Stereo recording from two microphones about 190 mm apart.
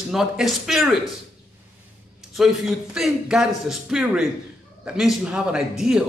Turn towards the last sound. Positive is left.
turn(degrees=-5)  # may be behind; listen again after turning